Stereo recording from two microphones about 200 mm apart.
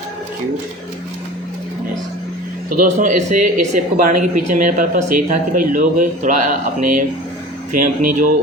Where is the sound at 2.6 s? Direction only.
40° right (ahead or behind).